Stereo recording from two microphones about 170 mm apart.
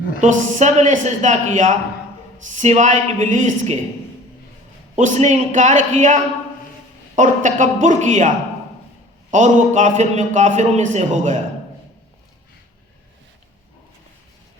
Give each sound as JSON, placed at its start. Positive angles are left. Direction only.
{"t": 0.2, "sound": "a man's voice", "side_deg": -45}
{"t": 4.9, "sound": "a man's voice", "side_deg": -45}
{"t": 9.3, "sound": "a man's voice", "side_deg": -45}